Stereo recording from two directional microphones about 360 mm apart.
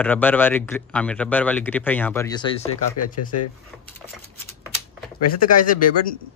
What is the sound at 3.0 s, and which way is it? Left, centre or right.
Speech, left.